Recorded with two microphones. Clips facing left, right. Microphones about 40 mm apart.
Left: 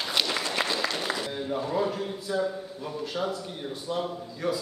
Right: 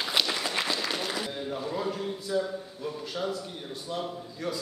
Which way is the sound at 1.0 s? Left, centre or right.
Centre.